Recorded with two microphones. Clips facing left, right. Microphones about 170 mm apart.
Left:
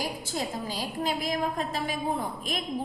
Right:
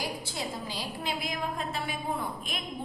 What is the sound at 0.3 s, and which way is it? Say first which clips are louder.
A woman's voice: left 4 dB; 45° left (ahead or behind).